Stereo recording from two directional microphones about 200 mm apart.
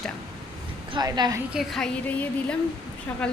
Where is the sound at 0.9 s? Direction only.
20° right (ahead or behind).